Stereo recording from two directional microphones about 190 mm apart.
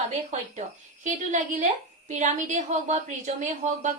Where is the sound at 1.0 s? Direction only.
40° right (ahead or behind).